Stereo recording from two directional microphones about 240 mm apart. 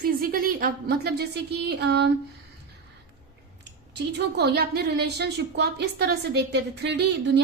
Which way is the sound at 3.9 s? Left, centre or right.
Right.